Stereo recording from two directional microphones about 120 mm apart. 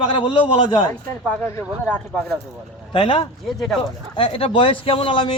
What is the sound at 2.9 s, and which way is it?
Speech, 45° left (ahead or behind).